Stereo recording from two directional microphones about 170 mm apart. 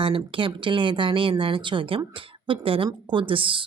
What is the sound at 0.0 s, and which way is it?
Speech, 30° right (ahead or behind).